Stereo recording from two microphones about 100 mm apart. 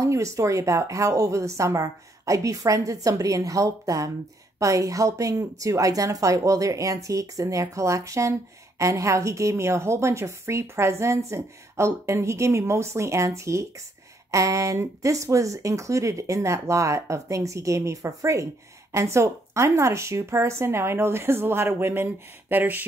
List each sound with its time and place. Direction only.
0.0 s a woman's voice: 30° right (ahead or behind)